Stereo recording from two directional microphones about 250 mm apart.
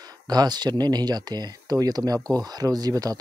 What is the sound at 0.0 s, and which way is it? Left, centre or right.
Speech, centre.